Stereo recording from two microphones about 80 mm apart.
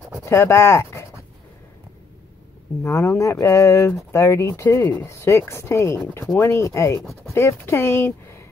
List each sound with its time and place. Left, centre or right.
0.2 s pant: left
2.8 s speech: left
7.0 s speech: centre
7.3 s speech: left